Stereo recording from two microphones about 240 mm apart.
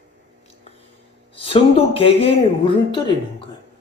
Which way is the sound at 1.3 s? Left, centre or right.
Left.